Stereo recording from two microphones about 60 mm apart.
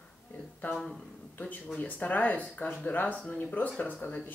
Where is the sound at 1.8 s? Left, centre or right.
Left.